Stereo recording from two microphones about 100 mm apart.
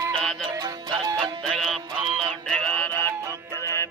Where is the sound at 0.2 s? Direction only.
5° left (ahead or behind).